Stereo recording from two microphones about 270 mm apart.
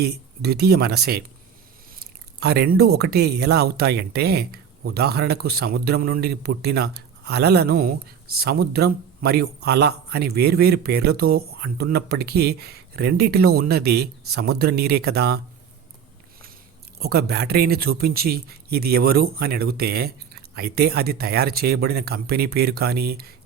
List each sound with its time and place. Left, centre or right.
0.0 s a man's voice: right
2.4 s a man's voice: right
17.0 s a man's voice: right